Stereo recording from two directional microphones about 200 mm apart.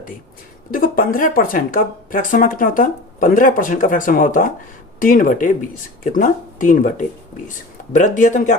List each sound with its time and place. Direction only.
0.7 s speech: 45° left (ahead or behind)